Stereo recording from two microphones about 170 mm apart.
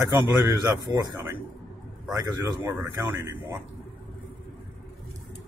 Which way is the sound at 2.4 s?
20° right (ahead or behind).